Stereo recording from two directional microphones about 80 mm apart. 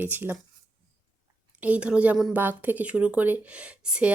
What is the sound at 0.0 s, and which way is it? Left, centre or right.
Speech, right.